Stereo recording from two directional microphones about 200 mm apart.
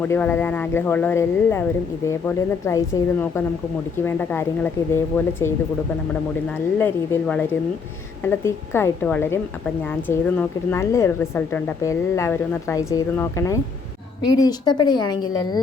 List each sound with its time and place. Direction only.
0.0 s a woman's voice: 10° left (ahead or behind)
6.7 s a woman's voice: 10° left (ahead or behind)